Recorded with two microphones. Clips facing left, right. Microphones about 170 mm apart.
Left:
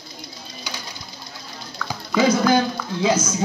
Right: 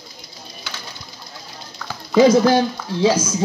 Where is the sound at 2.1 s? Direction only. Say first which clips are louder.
Right 5 dB; 30° right (ahead or behind).